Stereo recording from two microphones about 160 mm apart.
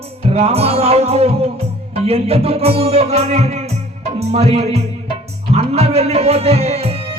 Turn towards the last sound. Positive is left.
turn(degrees=-40)  # may be behind; listen again after turning